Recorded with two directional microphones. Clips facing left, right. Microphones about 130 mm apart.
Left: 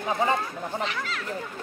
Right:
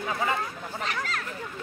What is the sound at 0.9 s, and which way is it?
Speech, 45° right (ahead or behind).